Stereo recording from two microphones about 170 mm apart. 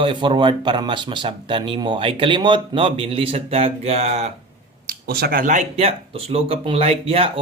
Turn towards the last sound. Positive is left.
turn(degrees=-35)  # may be behind; listen again after turning